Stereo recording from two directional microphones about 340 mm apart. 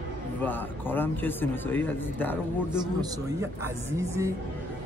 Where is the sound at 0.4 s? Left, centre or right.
Centre.